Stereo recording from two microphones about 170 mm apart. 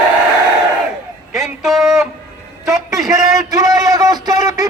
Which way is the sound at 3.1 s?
20° right (ahead or behind).